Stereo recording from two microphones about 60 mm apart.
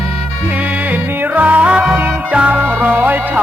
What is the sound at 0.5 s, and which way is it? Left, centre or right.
Music, right.